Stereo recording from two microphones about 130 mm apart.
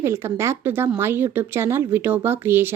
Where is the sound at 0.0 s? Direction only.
20° right (ahead or behind).